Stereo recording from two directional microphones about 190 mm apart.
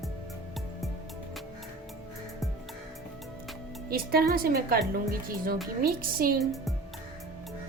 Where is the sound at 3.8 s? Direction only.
50° right (ahead or behind).